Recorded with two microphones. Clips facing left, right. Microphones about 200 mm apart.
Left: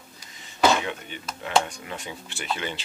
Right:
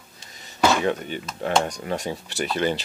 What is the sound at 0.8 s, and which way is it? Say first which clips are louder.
Speech: right 9 dB; 40° right (ahead or behind).